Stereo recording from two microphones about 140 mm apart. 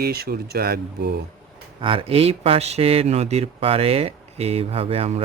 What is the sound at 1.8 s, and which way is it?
Speech, 40° right (ahead or behind).